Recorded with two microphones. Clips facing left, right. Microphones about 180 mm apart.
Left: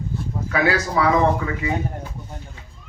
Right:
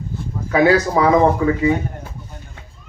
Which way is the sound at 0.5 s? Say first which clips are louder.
Right 6 dB; 30° right (ahead or behind).